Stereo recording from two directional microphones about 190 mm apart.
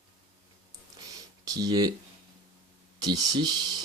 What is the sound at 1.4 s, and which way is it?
Speech, 20° right (ahead or behind).